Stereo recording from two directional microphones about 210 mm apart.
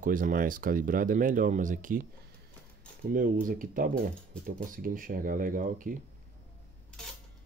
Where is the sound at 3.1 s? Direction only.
40° right (ahead or behind).